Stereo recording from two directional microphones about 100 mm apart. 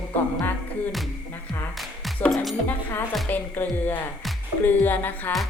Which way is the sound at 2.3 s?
Centre (ahead or behind).